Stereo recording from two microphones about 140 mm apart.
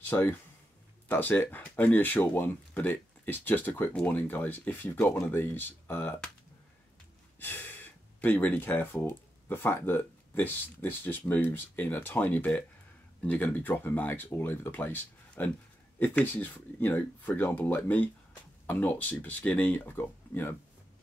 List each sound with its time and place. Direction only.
0.1 s speech: 10° left (ahead or behind)
7.3 s speech: 15° left (ahead or behind)